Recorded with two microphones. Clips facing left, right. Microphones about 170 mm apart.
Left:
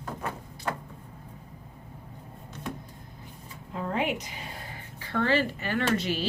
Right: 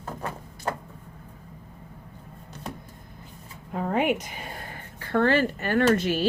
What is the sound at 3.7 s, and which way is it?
Speech, 55° right (ahead or behind).